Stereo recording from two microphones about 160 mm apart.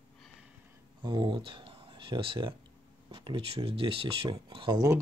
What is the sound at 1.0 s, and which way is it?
Speech, 25° right (ahead or behind).